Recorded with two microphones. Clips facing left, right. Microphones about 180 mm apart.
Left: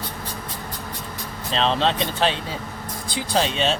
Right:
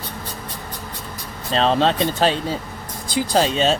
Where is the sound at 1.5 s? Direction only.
45° right (ahead or behind).